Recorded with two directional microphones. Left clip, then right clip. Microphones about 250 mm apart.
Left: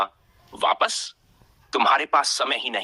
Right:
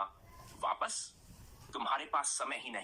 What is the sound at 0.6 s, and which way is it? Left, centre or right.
Speech, left.